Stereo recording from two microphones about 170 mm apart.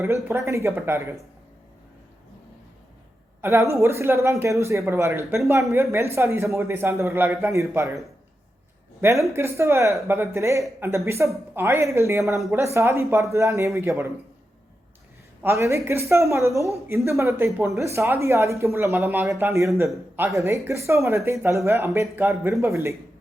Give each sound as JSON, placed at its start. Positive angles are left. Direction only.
{"t": 0.0, "sound": "a man's voice", "side_deg": -15}
{"t": 3.4, "sound": "a man's voice", "side_deg": -15}
{"t": 15.4, "sound": "a man's voice", "side_deg": -15}